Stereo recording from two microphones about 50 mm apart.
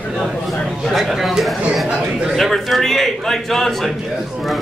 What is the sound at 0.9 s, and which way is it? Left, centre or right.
Speech, centre.